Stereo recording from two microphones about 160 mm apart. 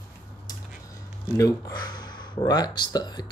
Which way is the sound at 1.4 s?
20° left (ahead or behind).